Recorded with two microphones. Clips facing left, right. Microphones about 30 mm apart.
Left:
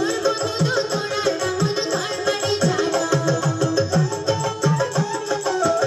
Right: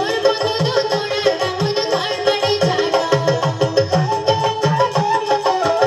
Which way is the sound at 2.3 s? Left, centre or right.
Right.